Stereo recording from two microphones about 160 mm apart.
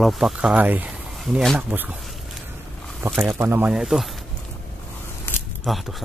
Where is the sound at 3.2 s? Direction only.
15° right (ahead or behind).